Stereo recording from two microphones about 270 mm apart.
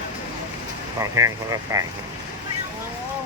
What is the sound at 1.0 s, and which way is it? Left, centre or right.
Speech, centre.